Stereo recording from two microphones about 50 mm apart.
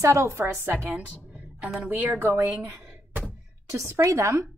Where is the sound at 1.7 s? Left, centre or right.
Right.